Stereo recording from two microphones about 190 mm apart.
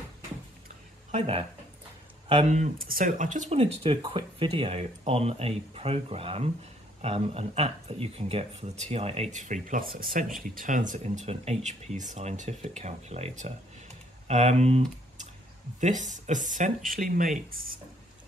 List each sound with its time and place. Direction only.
1.1 s speech: 30° right (ahead or behind); by 17.6 s 45° right (ahead or behind)